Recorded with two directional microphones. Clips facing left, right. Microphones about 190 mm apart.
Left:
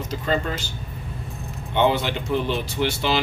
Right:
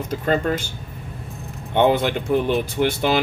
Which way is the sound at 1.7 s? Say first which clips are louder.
Right 3 dB; 50° right (ahead or behind).